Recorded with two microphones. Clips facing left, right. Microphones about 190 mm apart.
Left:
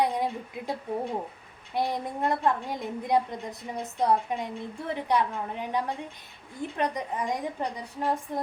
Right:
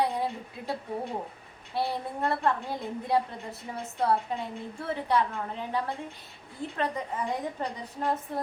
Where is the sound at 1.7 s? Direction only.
15° left (ahead or behind).